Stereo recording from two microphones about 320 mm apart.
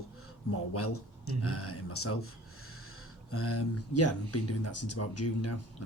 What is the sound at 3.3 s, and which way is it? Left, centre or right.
Speech, left.